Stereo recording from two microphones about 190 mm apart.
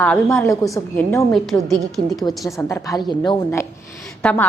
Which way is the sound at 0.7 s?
5° left (ahead or behind).